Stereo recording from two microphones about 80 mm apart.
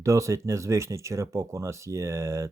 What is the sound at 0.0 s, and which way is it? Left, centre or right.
Speech, right.